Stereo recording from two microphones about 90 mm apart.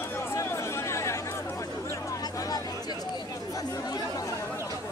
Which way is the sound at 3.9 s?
45° left (ahead or behind).